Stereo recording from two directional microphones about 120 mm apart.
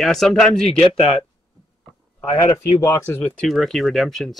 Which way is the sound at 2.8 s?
20° left (ahead or behind).